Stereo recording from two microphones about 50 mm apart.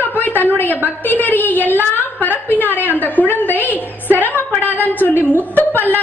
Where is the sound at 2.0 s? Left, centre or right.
Left.